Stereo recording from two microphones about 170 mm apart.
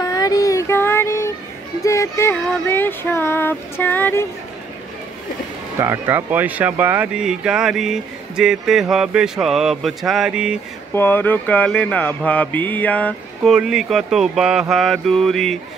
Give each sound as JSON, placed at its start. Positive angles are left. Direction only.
{"t": 0.0, "sound": "child singing", "side_deg": 20}
{"t": 1.8, "sound": "female singing", "side_deg": 15}
{"t": 5.8, "sound": "speech", "side_deg": -15}
{"t": 11.0, "sound": "speech", "side_deg": 10}